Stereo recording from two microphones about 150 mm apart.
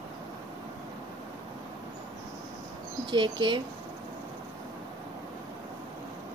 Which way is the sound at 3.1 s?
30° right (ahead or behind).